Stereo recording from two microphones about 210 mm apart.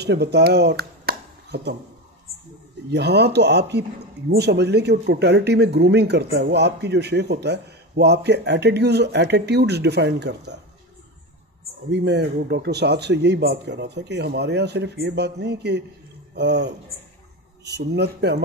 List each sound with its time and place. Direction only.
0.0 s speech: 50° right (ahead or behind)
2.9 s speech: 55° right (ahead or behind)
11.9 s speech: 50° right (ahead or behind)
17.7 s speech: 50° right (ahead or behind)